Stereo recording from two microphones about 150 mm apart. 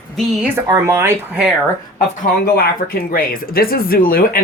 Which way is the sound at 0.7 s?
20° right (ahead or behind).